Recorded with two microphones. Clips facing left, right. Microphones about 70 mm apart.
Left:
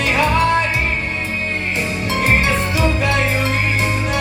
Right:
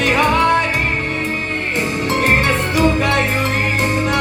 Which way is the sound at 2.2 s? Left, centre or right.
Right.